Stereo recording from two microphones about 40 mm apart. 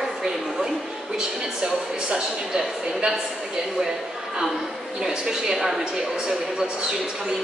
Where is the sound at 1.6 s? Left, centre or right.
Centre.